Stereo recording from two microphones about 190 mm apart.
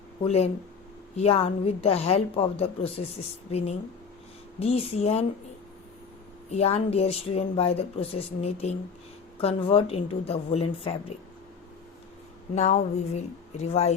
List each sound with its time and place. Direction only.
0.3 s a woman's voice: 35° left (ahead or behind)
6.5 s a woman's voice: 35° left (ahead or behind)
12.5 s a woman's voice: 35° left (ahead or behind)